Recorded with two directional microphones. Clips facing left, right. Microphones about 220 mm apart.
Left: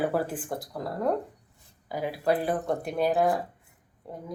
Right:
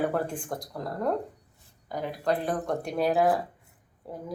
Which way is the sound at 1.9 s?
5° left (ahead or behind).